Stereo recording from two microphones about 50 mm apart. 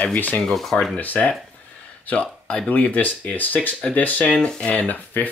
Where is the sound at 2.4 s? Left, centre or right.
Centre.